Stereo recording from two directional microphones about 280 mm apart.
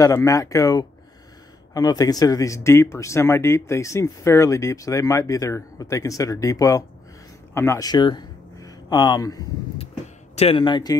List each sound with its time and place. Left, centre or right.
0.0 s speech: centre